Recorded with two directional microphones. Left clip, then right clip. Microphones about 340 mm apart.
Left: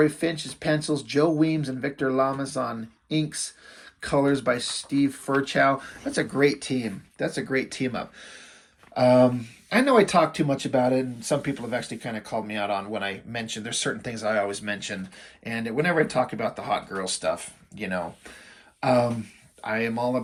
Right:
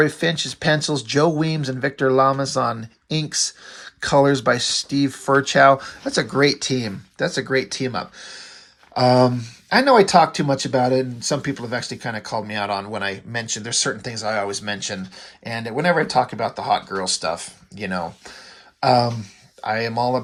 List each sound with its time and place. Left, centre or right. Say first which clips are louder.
0.0 s speech: right 4 dB; right
2.0 s speech: right 8 dB; right
4.0 s speech: right 7 dB; centre